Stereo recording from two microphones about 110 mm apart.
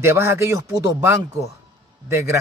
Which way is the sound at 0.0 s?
25° right (ahead or behind).